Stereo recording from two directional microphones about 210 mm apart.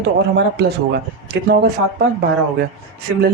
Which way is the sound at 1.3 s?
50° right (ahead or behind).